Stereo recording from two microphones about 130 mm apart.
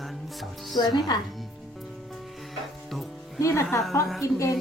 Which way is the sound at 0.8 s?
35° left (ahead or behind).